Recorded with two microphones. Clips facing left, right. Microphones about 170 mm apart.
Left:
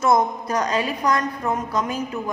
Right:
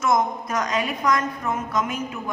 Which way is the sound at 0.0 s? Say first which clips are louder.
Left 3 dB; 35° left (ahead or behind).